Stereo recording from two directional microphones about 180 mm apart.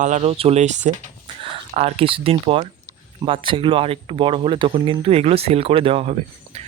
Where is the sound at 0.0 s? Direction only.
40° right (ahead or behind).